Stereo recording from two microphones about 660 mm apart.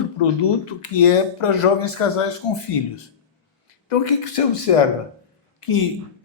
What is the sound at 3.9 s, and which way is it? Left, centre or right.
Speech, left.